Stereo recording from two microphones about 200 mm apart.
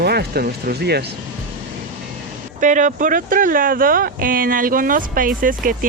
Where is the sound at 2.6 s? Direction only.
40° right (ahead or behind).